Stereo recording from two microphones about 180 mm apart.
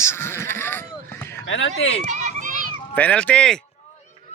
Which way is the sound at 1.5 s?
90° left.